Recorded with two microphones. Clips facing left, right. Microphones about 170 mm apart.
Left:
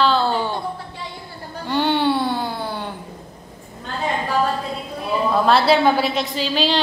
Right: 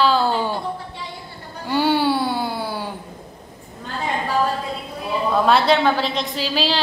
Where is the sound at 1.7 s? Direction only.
5° right (ahead or behind).